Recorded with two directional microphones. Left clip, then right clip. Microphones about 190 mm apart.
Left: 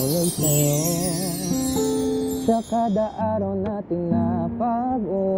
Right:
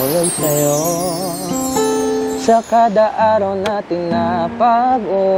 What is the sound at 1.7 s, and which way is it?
Music, 15° right (ahead or behind).